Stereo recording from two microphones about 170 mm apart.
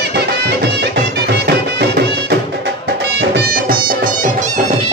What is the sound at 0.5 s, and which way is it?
Music, 80° right.